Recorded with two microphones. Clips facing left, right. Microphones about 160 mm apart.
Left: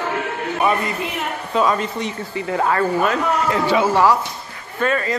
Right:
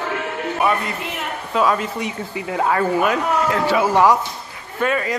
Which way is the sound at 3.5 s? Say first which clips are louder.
Left 2 dB; centre (ahead or behind).